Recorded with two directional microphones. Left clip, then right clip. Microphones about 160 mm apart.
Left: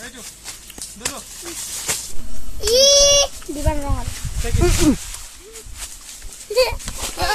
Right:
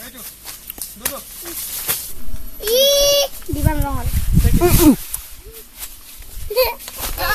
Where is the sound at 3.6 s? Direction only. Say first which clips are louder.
Right 1 dB; 60° right (ahead or behind).